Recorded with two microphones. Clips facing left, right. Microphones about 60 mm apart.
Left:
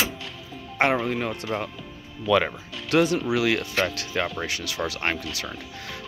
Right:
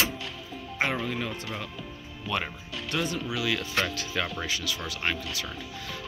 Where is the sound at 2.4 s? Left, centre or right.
Left.